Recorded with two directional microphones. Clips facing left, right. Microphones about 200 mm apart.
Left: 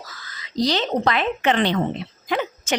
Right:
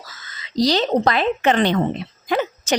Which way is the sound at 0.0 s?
25° right (ahead or behind).